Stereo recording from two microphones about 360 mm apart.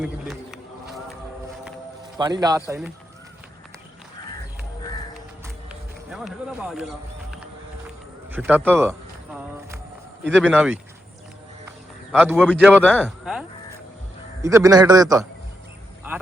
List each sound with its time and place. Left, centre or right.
0.0 s speech: centre
2.1 s speech: centre
6.1 s a man's voice: centre
10.3 s a man's voice: centre
12.1 s a man's voice: centre
14.4 s speech: centre